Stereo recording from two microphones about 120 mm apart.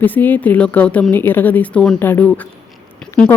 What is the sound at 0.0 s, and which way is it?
Speech, 15° left (ahead or behind).